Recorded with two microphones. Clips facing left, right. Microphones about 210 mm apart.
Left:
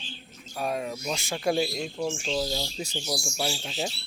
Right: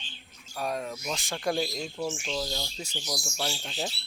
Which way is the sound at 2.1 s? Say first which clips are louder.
Left 4 dB; 20° left (ahead or behind).